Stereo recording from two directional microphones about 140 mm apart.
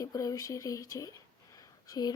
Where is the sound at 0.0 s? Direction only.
25° left (ahead or behind).